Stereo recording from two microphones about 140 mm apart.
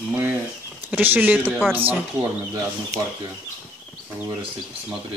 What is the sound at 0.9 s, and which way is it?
Speech, 15° right (ahead or behind).